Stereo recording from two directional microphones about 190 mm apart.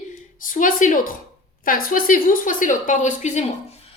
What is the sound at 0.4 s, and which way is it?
A woman's voice, 45° left (ahead or behind).